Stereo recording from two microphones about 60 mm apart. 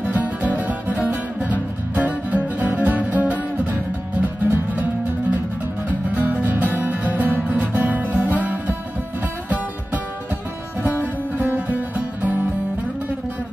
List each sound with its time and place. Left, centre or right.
0.0 s music: right
5.9 s music: right
11.0 s music: right